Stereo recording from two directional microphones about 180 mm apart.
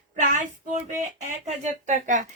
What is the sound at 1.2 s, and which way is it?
Speech, 40° right (ahead or behind).